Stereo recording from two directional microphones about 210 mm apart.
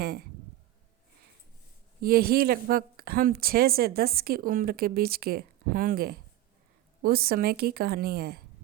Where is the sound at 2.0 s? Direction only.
45° right (ahead or behind).